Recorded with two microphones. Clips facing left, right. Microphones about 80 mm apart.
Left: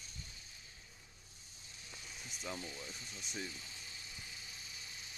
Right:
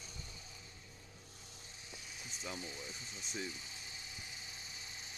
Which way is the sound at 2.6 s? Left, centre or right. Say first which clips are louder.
Even; centre.